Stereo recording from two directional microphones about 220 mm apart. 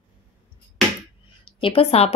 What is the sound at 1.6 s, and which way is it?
Speech, 25° left (ahead or behind).